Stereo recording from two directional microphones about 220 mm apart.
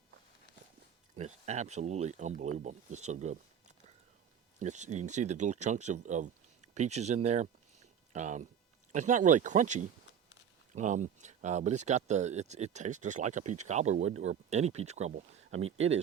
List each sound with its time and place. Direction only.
1.1 s speech: 30° right (ahead or behind)
4.6 s speech: 30° right (ahead or behind)